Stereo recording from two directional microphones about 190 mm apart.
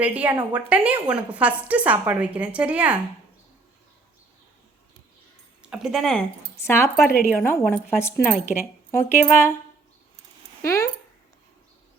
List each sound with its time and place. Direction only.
0.0 s a woman's voice: 10° right (ahead or behind)
5.7 s speech: centre (ahead or behind)
6.7 s speech: 15° left (ahead or behind)
10.6 s speech: 15° left (ahead or behind)